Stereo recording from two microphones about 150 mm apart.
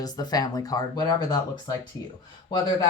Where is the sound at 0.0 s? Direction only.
25° left (ahead or behind).